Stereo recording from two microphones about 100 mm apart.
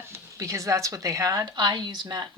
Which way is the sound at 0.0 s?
30° right (ahead or behind).